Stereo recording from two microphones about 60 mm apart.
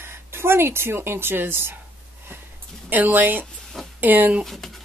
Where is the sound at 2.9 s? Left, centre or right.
Right.